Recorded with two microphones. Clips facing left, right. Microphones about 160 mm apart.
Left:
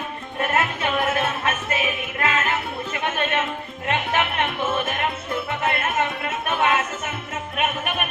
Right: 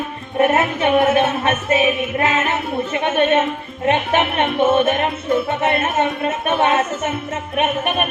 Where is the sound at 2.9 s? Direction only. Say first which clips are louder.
Right 9 dB; 25° right (ahead or behind).